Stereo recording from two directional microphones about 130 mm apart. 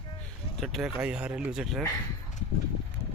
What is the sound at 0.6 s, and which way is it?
Speech, centre (ahead or behind).